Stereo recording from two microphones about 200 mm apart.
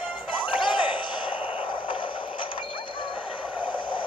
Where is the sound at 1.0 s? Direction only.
25° left (ahead or behind).